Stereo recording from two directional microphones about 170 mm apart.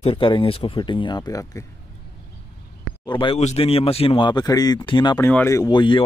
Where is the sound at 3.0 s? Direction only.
30° left (ahead or behind).